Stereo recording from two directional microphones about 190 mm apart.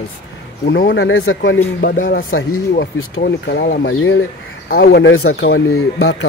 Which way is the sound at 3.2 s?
55° left (ahead or behind).